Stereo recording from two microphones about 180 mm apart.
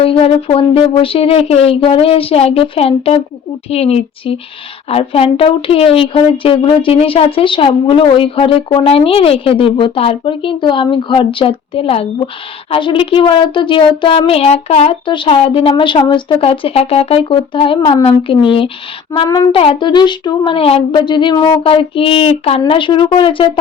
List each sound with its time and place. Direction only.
0.0 s a woman's voice: 30° left (ahead or behind)